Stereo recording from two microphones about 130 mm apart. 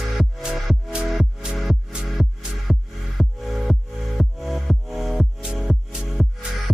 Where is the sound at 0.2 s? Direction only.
5° right (ahead or behind).